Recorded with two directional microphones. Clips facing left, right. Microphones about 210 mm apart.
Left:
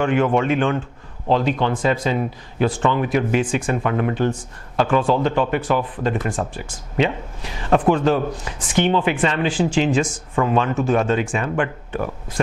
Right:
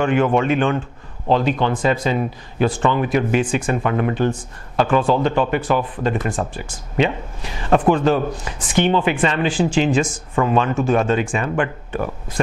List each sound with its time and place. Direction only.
0.0 s speech: 15° right (ahead or behind)